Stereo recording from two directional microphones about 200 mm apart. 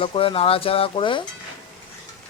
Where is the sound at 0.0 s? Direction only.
25° left (ahead or behind).